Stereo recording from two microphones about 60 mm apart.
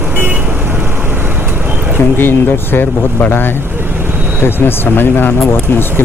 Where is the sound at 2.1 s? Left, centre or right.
Left.